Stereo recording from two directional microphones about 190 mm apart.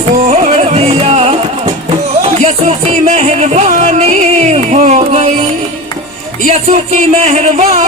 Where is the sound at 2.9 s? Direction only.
35° right (ahead or behind).